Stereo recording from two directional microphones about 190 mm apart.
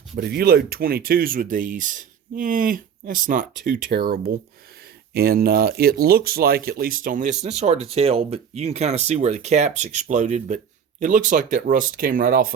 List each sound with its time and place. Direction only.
0.2 s speech: 55° right (ahead or behind)